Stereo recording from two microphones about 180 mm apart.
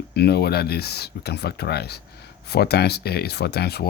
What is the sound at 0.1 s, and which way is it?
Speech, 65° left (ahead or behind).